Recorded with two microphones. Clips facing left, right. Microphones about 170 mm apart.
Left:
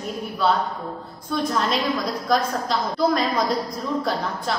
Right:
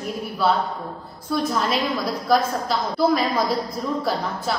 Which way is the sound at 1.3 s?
Centre (ahead or behind).